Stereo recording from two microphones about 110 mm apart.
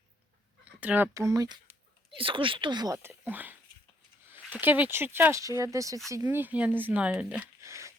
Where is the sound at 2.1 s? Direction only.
50° right (ahead or behind).